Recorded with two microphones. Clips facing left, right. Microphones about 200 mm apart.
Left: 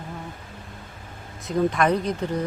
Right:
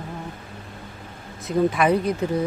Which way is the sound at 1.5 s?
5° right (ahead or behind).